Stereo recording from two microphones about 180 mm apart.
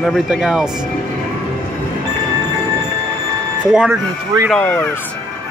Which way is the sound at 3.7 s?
5° right (ahead or behind).